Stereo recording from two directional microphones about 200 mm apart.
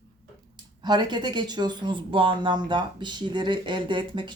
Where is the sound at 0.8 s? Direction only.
20° right (ahead or behind).